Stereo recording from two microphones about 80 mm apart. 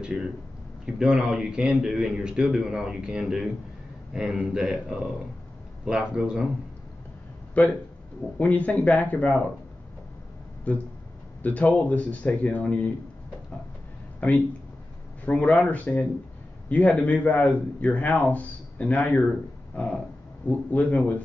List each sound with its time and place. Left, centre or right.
0.0 s speech: centre
8.4 s speech: centre
10.7 s a man's voice: centre
15.2 s a man's voice: centre